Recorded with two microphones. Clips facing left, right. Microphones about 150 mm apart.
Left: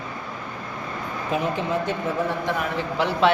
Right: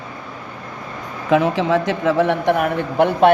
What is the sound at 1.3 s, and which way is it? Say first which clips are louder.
A man's voice: right 9 dB; 90° right.